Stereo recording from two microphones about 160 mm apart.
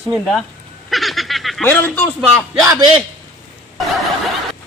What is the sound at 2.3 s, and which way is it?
Speech, 10° right (ahead or behind).